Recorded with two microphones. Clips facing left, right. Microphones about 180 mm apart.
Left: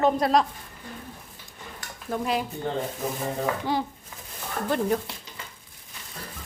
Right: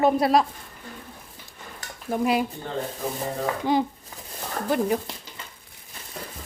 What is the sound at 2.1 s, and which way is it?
Speech, 10° right (ahead or behind).